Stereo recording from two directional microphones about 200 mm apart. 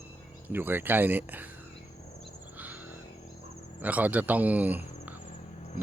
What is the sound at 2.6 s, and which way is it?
Vehicle, 10° right (ahead or behind).